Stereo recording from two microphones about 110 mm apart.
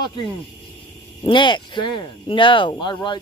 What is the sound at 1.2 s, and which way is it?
Speech, 45° left (ahead or behind).